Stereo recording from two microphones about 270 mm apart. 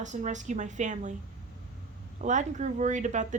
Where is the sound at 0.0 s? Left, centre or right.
Right.